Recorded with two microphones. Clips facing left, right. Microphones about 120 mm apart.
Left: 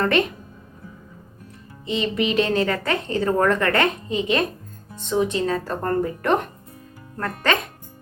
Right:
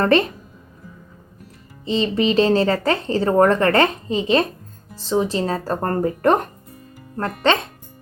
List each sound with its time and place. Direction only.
0.0 s speech: 35° right (ahead or behind)
1.8 s speech: 30° right (ahead or behind)
7.2 s speech: 25° right (ahead or behind)